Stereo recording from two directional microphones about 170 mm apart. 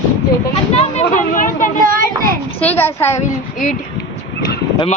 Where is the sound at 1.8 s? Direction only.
55° right (ahead or behind).